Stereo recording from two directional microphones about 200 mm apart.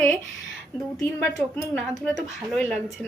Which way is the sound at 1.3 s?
10° left (ahead or behind).